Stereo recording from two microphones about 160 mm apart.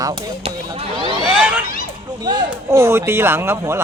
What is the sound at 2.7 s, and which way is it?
Speech, 15° right (ahead or behind).